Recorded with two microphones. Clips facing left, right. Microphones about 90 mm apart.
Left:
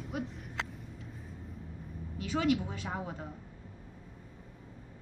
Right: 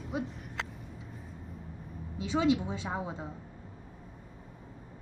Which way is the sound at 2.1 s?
20° right (ahead or behind).